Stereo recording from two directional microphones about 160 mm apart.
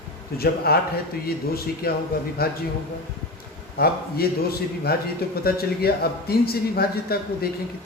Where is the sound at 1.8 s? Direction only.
70° left (ahead or behind).